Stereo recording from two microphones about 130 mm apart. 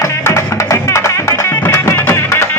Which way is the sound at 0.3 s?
20° left (ahead or behind).